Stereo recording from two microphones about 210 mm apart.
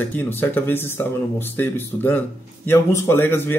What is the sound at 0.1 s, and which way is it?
Speech, 10° left (ahead or behind).